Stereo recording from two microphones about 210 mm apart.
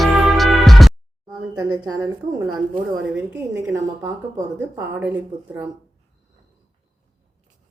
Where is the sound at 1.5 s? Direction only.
20° right (ahead or behind).